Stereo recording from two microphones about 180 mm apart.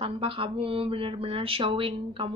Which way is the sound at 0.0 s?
30° right (ahead or behind).